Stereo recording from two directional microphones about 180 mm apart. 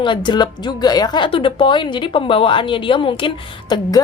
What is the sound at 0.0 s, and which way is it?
A woman's voice, 25° left (ahead or behind).